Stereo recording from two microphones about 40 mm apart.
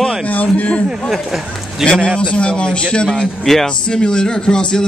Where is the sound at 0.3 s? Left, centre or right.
Left.